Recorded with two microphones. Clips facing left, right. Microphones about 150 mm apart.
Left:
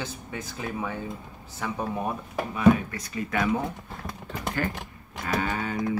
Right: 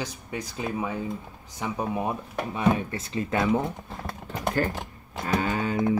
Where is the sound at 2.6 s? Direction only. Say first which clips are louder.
Left 4 dB; 25° right (ahead or behind).